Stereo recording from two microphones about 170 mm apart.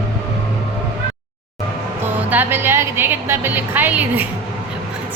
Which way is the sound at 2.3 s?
10° right (ahead or behind).